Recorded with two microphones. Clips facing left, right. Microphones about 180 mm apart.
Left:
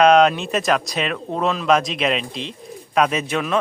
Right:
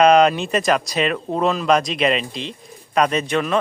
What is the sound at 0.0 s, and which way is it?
Speech, centre (ahead or behind).